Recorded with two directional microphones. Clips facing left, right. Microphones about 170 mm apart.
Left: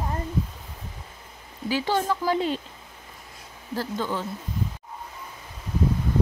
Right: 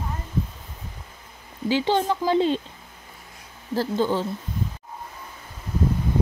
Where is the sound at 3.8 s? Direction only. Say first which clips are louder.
Right 6 dB; 30° right (ahead or behind).